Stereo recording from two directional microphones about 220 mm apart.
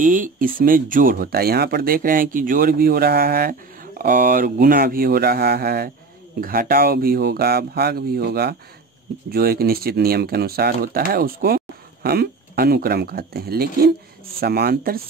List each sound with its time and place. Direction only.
0.0 s speech: 35° right (ahead or behind)